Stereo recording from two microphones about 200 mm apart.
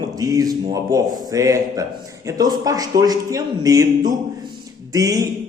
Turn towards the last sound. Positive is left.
turn(degrees=-15)  # may be behind; listen again after turning